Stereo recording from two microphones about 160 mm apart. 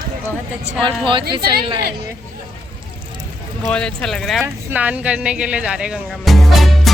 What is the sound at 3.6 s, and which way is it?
Speech, 5° left (ahead or behind).